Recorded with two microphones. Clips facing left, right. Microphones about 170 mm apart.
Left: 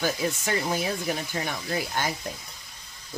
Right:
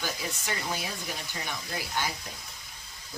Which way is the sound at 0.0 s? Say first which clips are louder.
Left 8 dB; 50° left (ahead or behind).